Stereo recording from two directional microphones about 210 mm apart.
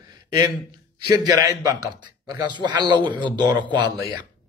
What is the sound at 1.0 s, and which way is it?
A man's voice, 20° right (ahead or behind).